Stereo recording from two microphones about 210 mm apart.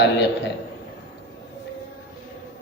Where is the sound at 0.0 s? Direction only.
55° left (ahead or behind).